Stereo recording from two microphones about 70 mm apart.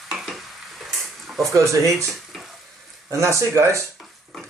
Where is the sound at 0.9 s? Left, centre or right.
Centre.